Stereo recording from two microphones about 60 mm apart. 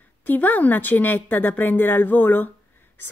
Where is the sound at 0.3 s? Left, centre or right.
Left.